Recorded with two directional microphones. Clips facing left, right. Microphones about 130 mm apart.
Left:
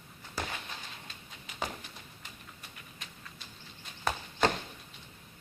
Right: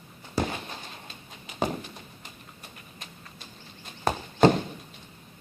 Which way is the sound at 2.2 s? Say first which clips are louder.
Right 3 dB; 40° right (ahead or behind).